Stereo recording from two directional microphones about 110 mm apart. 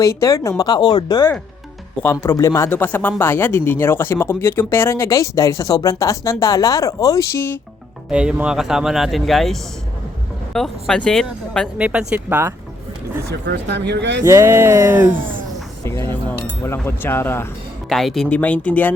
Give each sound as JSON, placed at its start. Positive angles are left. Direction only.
{"t": 0.0, "sound": "speech", "side_deg": 30}
{"t": 2.0, "sound": "speech", "side_deg": 25}
{"t": 8.1, "sound": "speech", "side_deg": -10}
{"t": 11.8, "sound": "speech", "side_deg": -10}
{"t": 14.3, "sound": "music", "side_deg": -25}
{"t": 15.8, "sound": "speech", "side_deg": 25}
{"t": 17.8, "sound": "speech", "side_deg": 0}
{"t": 18.3, "sound": "speech", "side_deg": 15}